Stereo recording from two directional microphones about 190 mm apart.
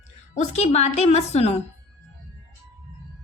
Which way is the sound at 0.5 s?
35° left (ahead or behind).